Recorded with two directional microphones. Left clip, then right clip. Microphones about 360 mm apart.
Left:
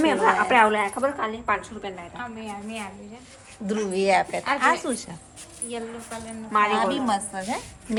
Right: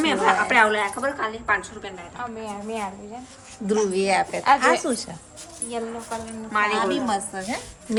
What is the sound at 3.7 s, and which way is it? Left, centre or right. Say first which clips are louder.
A woman's voice: right 1 dB; centre.